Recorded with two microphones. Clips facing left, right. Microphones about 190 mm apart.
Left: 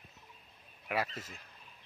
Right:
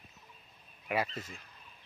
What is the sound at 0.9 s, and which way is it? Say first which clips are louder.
Speech: right 2 dB; centre (ahead or behind).